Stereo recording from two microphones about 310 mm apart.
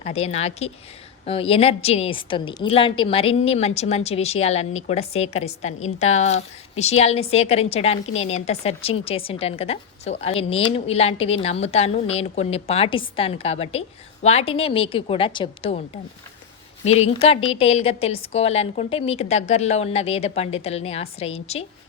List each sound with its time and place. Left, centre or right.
0.0 s a woman's voice: centre
16.8 s a woman's voice: centre